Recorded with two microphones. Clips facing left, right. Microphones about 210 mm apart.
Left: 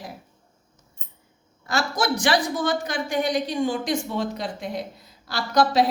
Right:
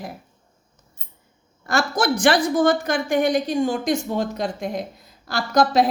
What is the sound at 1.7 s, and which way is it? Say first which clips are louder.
A woman's voice: right 3 dB; 50° right (ahead or behind).